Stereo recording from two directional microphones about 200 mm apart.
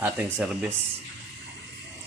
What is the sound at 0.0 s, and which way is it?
Speech, 5° right (ahead or behind).